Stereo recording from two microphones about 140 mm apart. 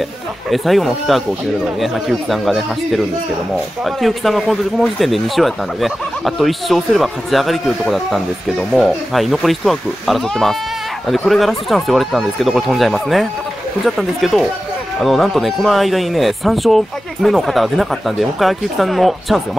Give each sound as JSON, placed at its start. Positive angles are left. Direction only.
{"t": 0.5, "sound": "speech", "side_deg": 0}